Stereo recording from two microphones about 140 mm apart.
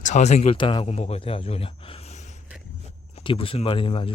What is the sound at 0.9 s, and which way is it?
Speech, 50° left (ahead or behind).